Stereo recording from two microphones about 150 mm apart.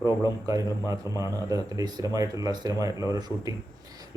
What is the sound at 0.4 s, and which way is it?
Speech, 20° right (ahead or behind).